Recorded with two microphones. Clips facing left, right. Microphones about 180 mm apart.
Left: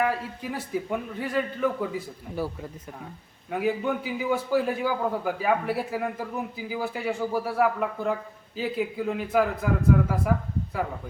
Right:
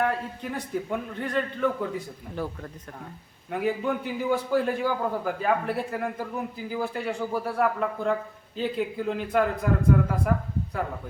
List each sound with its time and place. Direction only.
0.0 s a man's voice: 5° left (ahead or behind)
3.5 s a man's voice: centre (ahead or behind)